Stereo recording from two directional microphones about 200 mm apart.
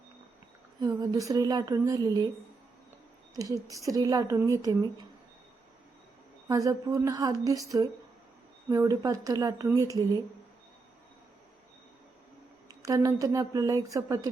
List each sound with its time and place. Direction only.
0.8 s speech: 20° right (ahead or behind)
3.3 s speech: 15° right (ahead or behind)
6.5 s speech: 15° right (ahead or behind)
12.6 s speech: 15° right (ahead or behind)